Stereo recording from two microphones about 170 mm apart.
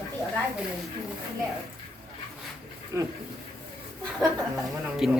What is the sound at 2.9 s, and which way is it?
Speech, 15° right (ahead or behind).